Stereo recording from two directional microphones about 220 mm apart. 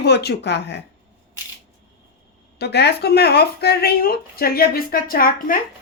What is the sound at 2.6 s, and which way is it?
Speech, 50° left (ahead or behind).